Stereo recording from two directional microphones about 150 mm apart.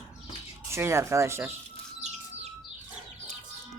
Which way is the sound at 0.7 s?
15° right (ahead or behind).